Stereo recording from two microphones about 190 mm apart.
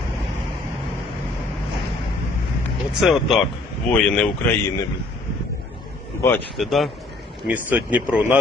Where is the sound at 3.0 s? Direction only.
Centre (ahead or behind).